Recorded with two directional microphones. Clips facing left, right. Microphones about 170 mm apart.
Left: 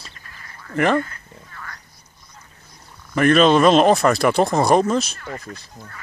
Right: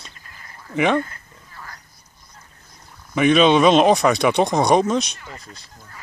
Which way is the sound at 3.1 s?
Centre (ahead or behind).